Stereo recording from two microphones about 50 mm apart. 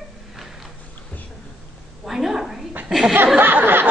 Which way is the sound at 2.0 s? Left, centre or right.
Centre.